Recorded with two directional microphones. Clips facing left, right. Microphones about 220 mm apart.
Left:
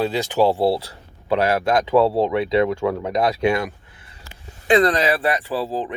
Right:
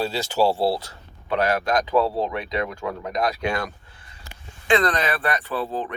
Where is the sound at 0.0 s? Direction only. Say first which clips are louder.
Left 3 dB; 15° left (ahead or behind).